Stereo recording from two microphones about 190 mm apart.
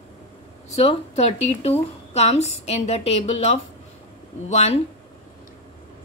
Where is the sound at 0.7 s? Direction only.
35° left (ahead or behind).